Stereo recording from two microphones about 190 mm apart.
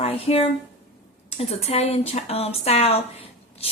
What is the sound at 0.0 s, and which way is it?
A woman's voice, 30° left (ahead or behind).